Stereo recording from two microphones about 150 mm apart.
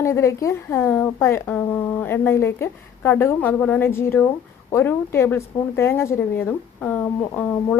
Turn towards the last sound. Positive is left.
turn(degrees=10)  # may be behind; listen again after turning